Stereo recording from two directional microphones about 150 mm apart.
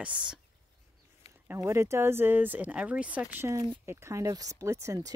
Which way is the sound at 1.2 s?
45° left (ahead or behind).